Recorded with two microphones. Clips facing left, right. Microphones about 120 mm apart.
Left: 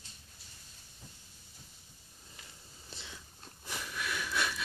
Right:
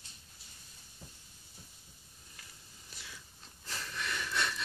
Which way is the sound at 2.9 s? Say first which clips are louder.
Left 3 dB; 25° left (ahead or behind).